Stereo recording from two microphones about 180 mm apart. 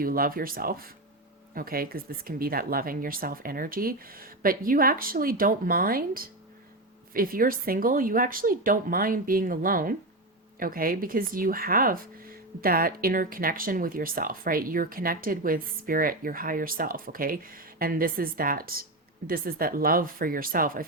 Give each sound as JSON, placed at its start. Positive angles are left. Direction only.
{"t": 0.0, "sound": "speech", "side_deg": -55}